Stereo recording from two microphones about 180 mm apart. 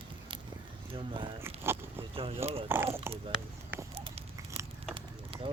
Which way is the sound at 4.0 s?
30° right (ahead or behind).